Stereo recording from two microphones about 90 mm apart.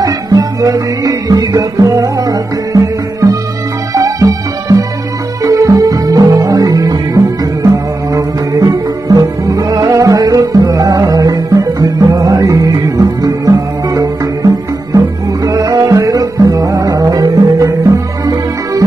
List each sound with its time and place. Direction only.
0.0 s music: 45° right (ahead or behind)